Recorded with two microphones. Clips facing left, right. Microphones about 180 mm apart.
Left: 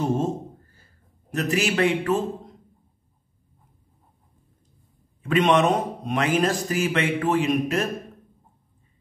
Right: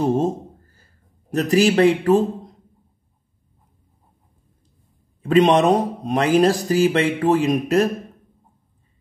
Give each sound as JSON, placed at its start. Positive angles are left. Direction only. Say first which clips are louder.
{"t": 1.3, "sound": "speech", "louder": "right 7 dB", "side_deg": -35}
{"t": 5.2, "sound": "speech", "louder": "right 5 dB", "side_deg": -35}